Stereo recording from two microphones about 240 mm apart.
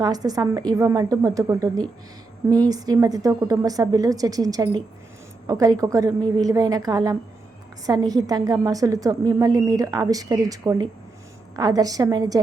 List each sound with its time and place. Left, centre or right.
0.0 s a woman's voice: centre